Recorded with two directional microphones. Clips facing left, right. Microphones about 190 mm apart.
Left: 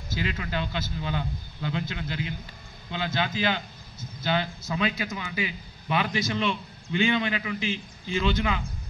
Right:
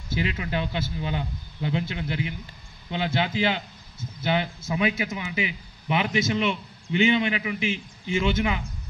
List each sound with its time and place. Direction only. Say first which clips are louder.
0.1 s a man's voice: right 3 dB; 20° right (ahead or behind)